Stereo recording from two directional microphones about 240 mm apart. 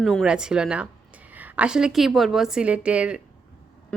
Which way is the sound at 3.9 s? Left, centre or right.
Centre.